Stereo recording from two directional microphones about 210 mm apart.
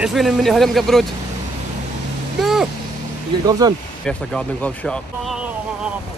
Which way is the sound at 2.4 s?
Centre (ahead or behind).